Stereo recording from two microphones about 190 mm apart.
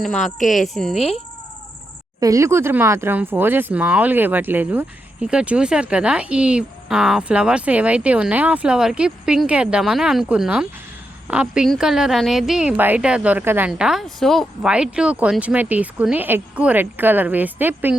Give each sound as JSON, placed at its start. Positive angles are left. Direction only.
{"t": 0.0, "sound": "speech", "side_deg": 0}
{"t": 0.3, "sound": "speech", "side_deg": 40}
{"t": 0.7, "sound": "speech", "side_deg": 0}
{"t": 0.9, "sound": "speech", "side_deg": 35}
{"t": 2.2, "sound": "speech", "side_deg": -15}